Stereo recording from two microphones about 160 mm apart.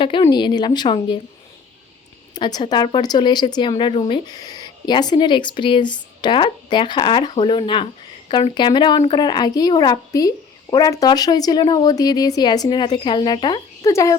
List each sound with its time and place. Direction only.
0.0 s a woman's voice: 30° left (ahead or behind)
2.3 s a woman's voice: 25° left (ahead or behind)